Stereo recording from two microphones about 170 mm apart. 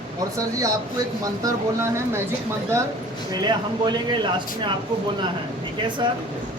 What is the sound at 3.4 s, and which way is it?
Speech, 25° right (ahead or behind).